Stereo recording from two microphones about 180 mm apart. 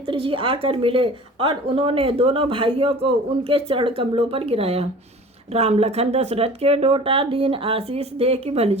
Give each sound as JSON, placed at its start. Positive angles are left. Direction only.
{"t": 0.1, "sound": "a woman's voice", "side_deg": -30}